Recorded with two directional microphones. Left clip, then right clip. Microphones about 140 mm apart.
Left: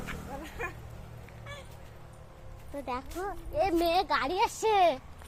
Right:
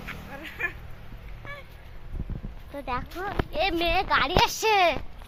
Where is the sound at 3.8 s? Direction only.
15° left (ahead or behind).